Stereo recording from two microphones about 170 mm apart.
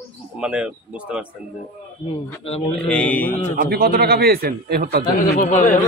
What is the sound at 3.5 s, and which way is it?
A man's voice, 60° right (ahead or behind).